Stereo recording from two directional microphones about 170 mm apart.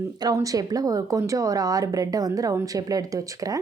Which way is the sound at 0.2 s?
20° right (ahead or behind).